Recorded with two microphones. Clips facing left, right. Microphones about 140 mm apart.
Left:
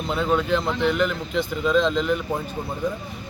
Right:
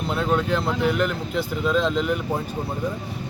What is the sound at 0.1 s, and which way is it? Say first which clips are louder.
Speech: left 1 dB; centre (ahead or behind).